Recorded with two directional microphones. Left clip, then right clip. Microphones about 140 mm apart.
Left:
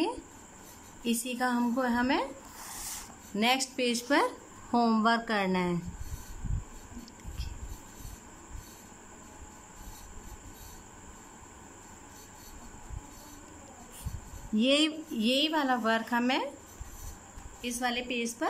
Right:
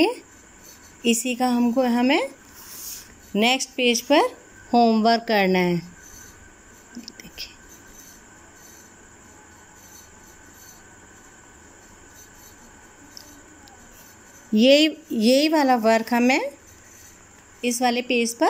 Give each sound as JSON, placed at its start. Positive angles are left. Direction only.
{"t": 1.0, "sound": "a woman's voice", "side_deg": -25}
{"t": 3.3, "sound": "speech", "side_deg": -20}
{"t": 5.0, "sound": "a woman's voice", "side_deg": -25}
{"t": 7.2, "sound": "whispering", "side_deg": -25}
{"t": 14.5, "sound": "a woman's voice", "side_deg": -30}
{"t": 17.6, "sound": "a woman's voice", "side_deg": -30}